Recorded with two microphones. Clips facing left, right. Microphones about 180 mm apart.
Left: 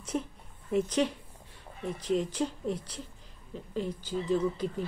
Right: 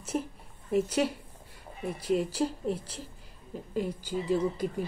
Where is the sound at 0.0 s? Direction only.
5° right (ahead or behind).